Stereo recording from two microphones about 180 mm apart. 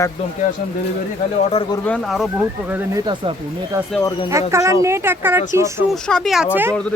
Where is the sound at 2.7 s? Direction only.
10° right (ahead or behind).